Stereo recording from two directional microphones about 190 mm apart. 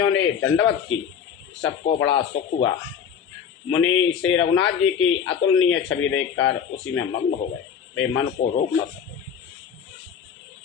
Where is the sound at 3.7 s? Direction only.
90° left.